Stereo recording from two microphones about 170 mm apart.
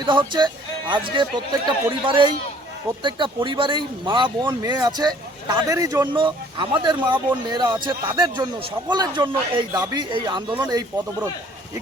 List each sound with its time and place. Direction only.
0.0 s speech: 30° right (ahead or behind)